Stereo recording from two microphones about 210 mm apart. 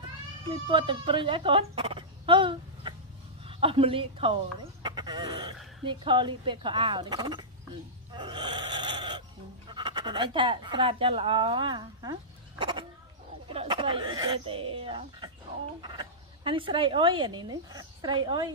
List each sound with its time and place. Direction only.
0.5 s a woman's voice: 25° right (ahead or behind)
4.8 s chicken: 20° right (ahead or behind)
5.9 s speech: 20° right (ahead or behind)
8.1 s gasp: 20° right (ahead or behind)
9.7 s speech: 20° right (ahead or behind)